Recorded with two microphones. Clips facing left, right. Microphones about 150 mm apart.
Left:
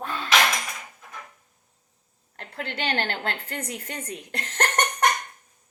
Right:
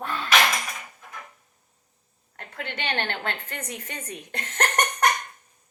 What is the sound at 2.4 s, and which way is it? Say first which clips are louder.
A woman's voice: left 2 dB; 35° left (ahead or behind).